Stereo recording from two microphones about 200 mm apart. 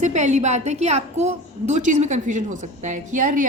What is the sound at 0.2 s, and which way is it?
A woman's voice, 35° right (ahead or behind).